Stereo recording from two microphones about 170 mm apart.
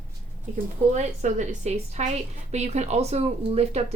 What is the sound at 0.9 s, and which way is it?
A woman's voice, 45° right (ahead or behind).